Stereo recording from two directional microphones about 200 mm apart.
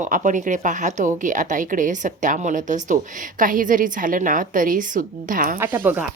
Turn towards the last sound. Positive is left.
turn(degrees=-10)  # may be behind; listen again after turning